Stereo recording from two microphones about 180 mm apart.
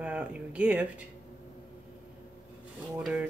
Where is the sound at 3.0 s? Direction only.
5° right (ahead or behind).